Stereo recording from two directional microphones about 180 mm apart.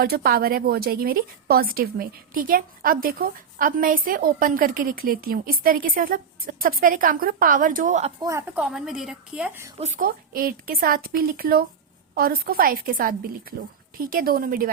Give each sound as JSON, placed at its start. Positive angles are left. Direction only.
{"t": 0.0, "sound": "a woman's voice", "side_deg": -60}
{"t": 8.2, "sound": "a woman's voice", "side_deg": -15}
{"t": 8.6, "sound": "a woman's voice", "side_deg": -5}
{"t": 9.7, "sound": "a woman's voice", "side_deg": -35}
{"t": 10.0, "sound": "a woman's voice", "side_deg": -55}